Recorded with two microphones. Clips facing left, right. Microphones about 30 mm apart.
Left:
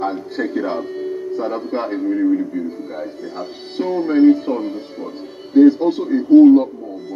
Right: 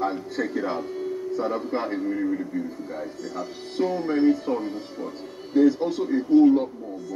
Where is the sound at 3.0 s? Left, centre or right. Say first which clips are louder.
Left 4 dB; left.